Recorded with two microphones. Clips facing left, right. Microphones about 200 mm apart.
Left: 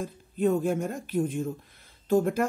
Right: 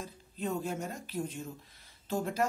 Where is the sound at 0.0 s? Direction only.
55° left (ahead or behind).